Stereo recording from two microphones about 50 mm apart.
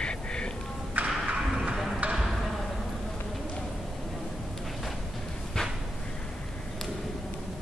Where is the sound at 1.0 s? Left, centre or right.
Right.